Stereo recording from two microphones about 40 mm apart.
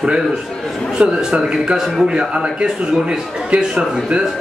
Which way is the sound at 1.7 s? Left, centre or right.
Centre.